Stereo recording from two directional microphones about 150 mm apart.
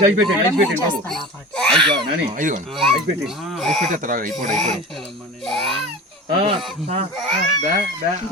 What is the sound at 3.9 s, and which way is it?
Speech, 65° right (ahead or behind).